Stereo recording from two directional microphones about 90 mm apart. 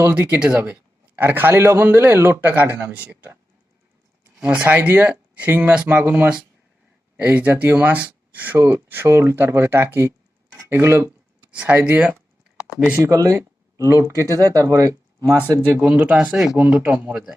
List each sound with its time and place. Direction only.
0.1 s speech: 15° right (ahead or behind)
0.6 s speech: 20° right (ahead or behind)
4.4 s speech: 15° right (ahead or behind)
11.5 s speech: 15° right (ahead or behind)
13.0 s speech: 35° right (ahead or behind)
15.8 s speech: 15° right (ahead or behind)
17.1 s a man's voice: 5° right (ahead or behind)